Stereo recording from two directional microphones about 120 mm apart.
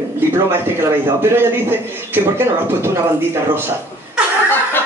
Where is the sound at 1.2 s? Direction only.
20° right (ahead or behind).